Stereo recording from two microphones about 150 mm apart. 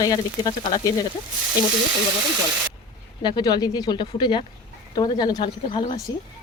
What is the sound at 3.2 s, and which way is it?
Speech, 30° left (ahead or behind).